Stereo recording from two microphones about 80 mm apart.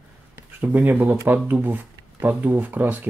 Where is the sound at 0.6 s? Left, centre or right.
Right.